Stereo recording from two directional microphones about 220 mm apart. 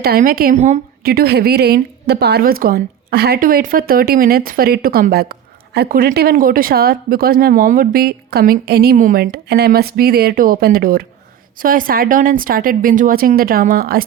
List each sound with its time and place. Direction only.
0.0 s speech: 40° right (ahead or behind)
1.0 s a woman's voice: 45° right (ahead or behind)